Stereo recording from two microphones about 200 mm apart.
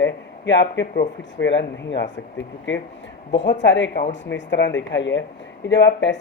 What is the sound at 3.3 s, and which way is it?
Speech, 65° left (ahead or behind).